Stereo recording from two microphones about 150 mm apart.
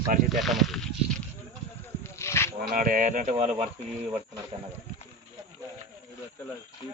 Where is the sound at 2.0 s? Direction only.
20° left (ahead or behind).